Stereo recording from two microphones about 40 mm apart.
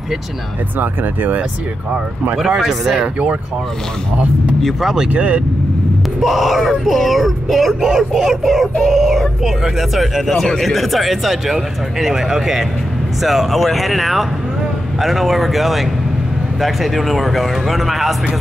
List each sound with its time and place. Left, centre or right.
0.7 s speech: right
2.3 s speech: centre
5.1 s speech: right
6.2 s speech: centre